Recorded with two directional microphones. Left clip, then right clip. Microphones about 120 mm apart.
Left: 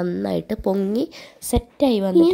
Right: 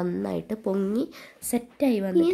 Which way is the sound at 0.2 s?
35° left (ahead or behind).